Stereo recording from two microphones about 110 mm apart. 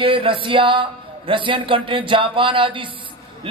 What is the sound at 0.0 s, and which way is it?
A man's voice, 50° right (ahead or behind).